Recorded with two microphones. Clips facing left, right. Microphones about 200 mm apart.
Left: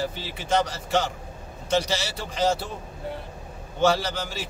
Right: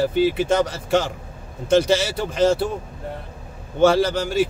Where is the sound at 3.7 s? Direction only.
55° right (ahead or behind).